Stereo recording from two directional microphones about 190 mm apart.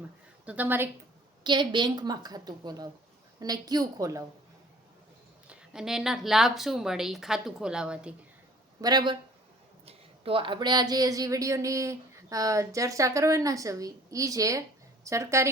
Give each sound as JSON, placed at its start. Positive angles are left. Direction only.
{"t": 0.4, "sound": "speech", "side_deg": -10}
{"t": 1.5, "sound": "a woman's voice", "side_deg": -25}
{"t": 5.5, "sound": "a woman's voice", "side_deg": -5}
{"t": 8.8, "sound": "a woman's voice", "side_deg": -20}